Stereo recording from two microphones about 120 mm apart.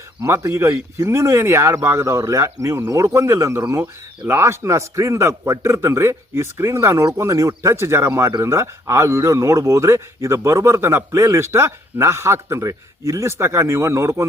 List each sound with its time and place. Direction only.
0.2 s a man's voice: 25° right (ahead or behind)